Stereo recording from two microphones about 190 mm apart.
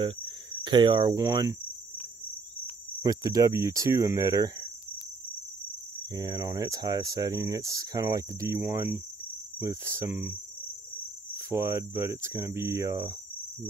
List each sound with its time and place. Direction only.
0.0 s cricket: 25° right (ahead or behind)
3.0 s speech: 20° right (ahead or behind)
6.1 s speech: 20° right (ahead or behind)
11.3 s speech: 15° right (ahead or behind)